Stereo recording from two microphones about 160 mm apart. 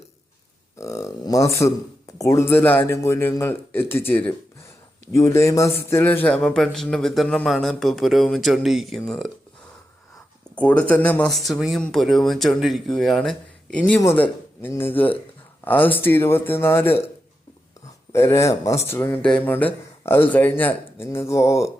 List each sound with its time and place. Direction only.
0.8 s a man's voice: 20° left (ahead or behind); by 9.3 s centre (ahead or behind)
10.5 s a man's voice: 10° left (ahead or behind)
18.1 s a man's voice: 15° left (ahead or behind)